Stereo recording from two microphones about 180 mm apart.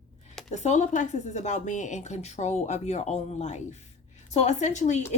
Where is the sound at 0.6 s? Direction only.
40° left (ahead or behind).